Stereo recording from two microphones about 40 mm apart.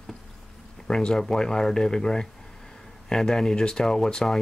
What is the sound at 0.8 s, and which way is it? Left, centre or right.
Speech, centre.